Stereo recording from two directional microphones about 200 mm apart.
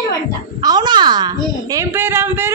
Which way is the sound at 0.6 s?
20° right (ahead or behind).